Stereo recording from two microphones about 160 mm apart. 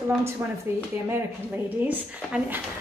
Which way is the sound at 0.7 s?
15° right (ahead or behind).